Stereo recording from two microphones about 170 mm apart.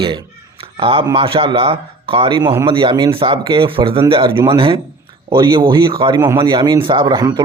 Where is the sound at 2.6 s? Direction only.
30° right (ahead or behind).